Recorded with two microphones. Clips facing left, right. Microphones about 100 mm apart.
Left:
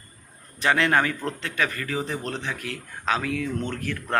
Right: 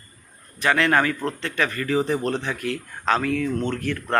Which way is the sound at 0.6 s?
20° left (ahead or behind).